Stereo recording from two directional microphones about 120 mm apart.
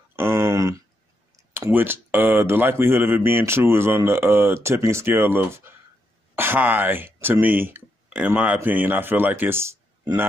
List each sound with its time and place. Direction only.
0.1 s a sound: 20° right (ahead or behind)
1.3 s clicking: 30° right (ahead or behind)
1.7 s speech: 15° right (ahead or behind)